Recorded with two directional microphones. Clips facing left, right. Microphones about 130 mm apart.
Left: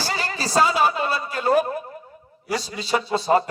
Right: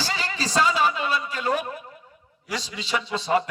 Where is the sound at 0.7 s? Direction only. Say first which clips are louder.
Left 2 dB; 40° left (ahead or behind).